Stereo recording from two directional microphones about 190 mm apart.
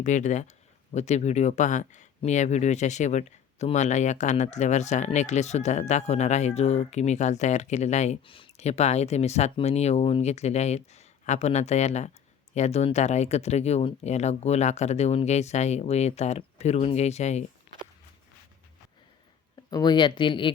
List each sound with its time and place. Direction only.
0.0 s speech: 40° left (ahead or behind)
19.7 s speech: 20° left (ahead or behind)